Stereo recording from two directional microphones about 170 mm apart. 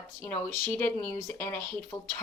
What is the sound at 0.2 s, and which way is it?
Speech, 10° left (ahead or behind).